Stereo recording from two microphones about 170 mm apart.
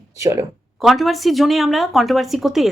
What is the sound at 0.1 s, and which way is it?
Speech, 20° right (ahead or behind).